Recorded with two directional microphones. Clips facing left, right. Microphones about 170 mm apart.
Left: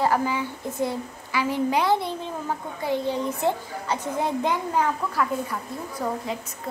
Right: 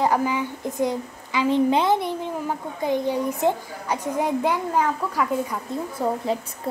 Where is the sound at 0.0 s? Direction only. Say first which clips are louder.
Right 2 dB; 15° right (ahead or behind).